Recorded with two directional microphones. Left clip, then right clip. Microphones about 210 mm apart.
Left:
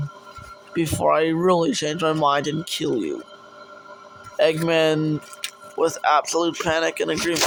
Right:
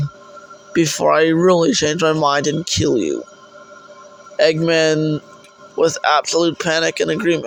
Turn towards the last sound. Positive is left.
turn(degrees=-20)  # may be behind; listen again after turning